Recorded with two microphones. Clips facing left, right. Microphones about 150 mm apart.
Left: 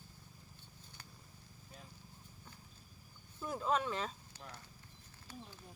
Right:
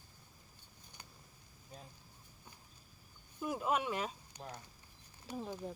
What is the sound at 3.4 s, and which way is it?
Speech, 15° right (ahead or behind).